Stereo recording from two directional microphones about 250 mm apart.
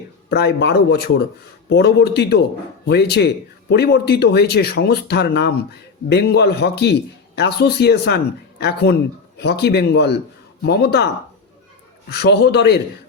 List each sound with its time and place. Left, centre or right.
0.3 s speech: left
12.1 s speech: left